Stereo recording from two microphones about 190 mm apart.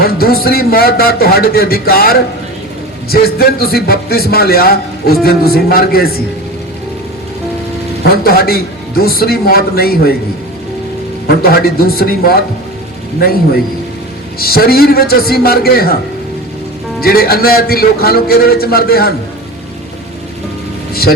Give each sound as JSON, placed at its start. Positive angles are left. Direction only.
{"t": 0.0, "sound": "speech", "side_deg": 50}
{"t": 8.0, "sound": "speech", "side_deg": 50}
{"t": 11.4, "sound": "speech", "side_deg": 50}
{"t": 14.3, "sound": "speech", "side_deg": 55}
{"t": 17.0, "sound": "speech", "side_deg": 50}
{"t": 20.9, "sound": "speech", "side_deg": 50}